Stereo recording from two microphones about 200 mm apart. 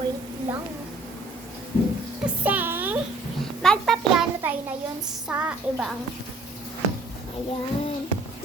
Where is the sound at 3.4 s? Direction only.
Centre (ahead or behind).